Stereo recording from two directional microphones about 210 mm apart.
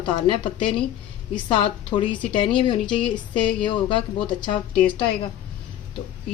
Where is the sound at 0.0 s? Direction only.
25° left (ahead or behind).